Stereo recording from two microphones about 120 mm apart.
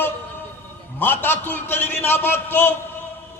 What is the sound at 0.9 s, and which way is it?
A man's voice, 15° left (ahead or behind).